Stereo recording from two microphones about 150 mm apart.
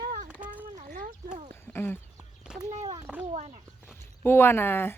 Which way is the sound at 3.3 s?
45° right (ahead or behind).